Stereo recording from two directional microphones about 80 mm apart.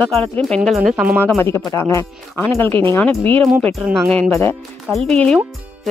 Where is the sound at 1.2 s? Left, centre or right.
Left.